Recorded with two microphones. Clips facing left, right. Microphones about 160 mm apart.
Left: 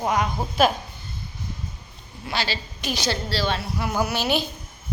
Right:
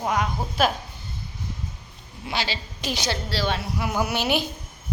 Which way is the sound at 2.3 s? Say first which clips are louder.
Left 1 dB; 15° right (ahead or behind).